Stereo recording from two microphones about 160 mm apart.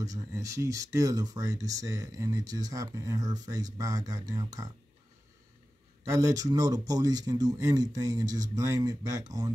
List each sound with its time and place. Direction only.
0.0 s speech: 20° right (ahead or behind)
6.0 s speech: 20° right (ahead or behind)